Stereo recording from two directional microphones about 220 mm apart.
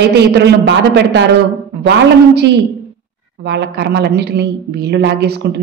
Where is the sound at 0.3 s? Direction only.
50° right (ahead or behind).